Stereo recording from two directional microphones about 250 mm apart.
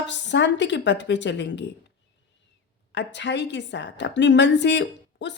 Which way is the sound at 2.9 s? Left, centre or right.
Left.